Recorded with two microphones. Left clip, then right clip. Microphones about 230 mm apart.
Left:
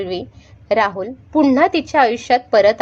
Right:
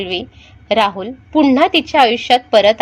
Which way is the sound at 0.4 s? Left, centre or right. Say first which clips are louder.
Right 2 dB; right.